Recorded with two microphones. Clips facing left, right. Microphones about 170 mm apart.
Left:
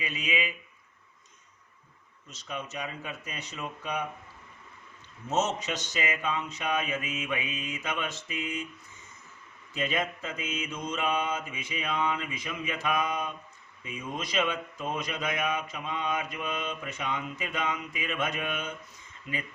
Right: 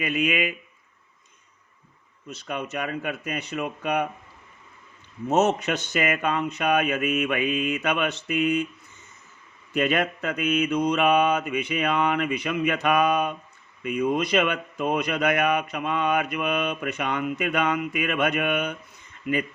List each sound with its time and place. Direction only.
0.0 s speech: 60° right (ahead or behind)
2.2 s speech: 60° right (ahead or behind)
5.3 s speech: 60° right (ahead or behind)
9.7 s mantra: 65° right (ahead or behind)
13.8 s speech: 65° right (ahead or behind)